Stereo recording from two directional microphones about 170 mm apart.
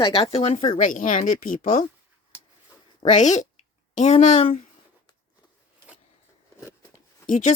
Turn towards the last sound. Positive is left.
turn(degrees=45)  # may be behind; listen again after turning